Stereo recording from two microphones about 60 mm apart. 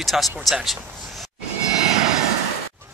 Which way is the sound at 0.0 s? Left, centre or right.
Centre.